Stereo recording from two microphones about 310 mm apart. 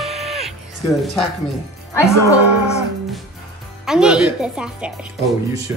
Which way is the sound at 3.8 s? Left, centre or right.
Centre.